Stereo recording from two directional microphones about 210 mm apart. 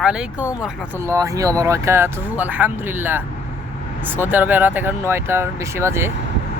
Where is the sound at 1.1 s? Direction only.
15° right (ahead or behind).